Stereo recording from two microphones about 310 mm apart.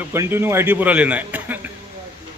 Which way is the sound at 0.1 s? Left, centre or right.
Centre.